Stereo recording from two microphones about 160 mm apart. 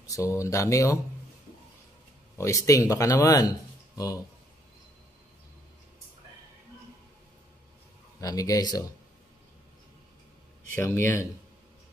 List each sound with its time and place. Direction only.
0.0 s speech: 20° left (ahead or behind)
2.3 s speech: 20° left (ahead or behind)
8.2 s speech: 20° left (ahead or behind)
10.7 s speech: 10° left (ahead or behind)